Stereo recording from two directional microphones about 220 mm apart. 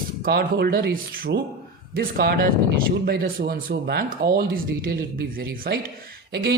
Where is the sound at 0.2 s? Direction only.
45° right (ahead or behind).